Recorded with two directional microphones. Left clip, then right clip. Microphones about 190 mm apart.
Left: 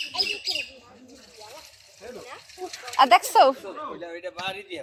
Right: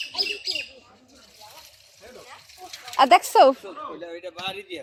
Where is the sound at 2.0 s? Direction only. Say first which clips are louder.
Left 4 dB; 45° left (ahead or behind).